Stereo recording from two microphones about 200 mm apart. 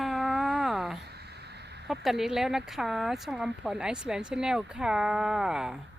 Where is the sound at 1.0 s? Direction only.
55° right (ahead or behind).